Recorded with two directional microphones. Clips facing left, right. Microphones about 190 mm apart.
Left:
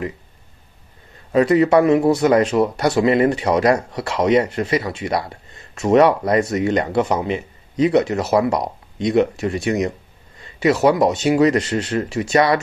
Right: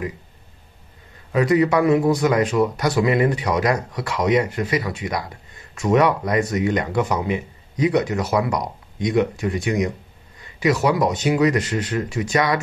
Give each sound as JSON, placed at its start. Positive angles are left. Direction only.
{"t": 1.3, "sound": "speech", "side_deg": 25}
{"t": 10.4, "sound": "a sound", "side_deg": 30}
{"t": 10.9, "sound": "speech", "side_deg": 25}